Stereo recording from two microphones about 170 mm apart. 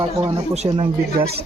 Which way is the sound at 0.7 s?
30° right (ahead or behind).